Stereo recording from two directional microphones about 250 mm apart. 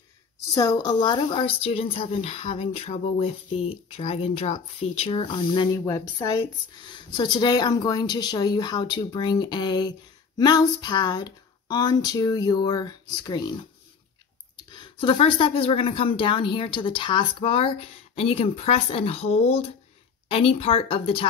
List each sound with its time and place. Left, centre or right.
0.6 s a woman's voice: centre
14.7 s a woman's voice: centre